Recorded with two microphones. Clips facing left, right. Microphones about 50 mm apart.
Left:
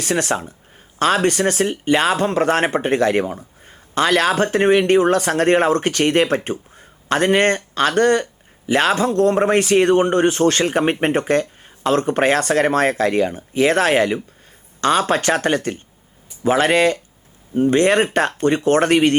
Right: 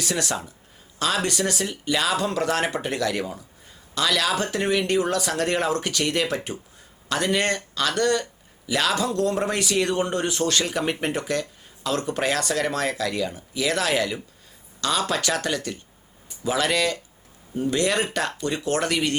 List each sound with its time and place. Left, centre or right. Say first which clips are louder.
0.0 s speech: left 7 dB; left